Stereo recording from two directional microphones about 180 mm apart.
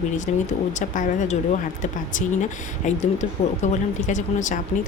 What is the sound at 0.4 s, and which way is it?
A woman's voice, 45° left (ahead or behind).